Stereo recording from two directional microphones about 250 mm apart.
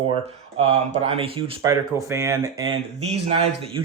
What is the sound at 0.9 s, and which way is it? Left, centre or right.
Speech, right.